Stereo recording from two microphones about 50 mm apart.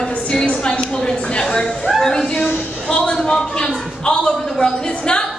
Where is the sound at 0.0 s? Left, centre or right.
Centre.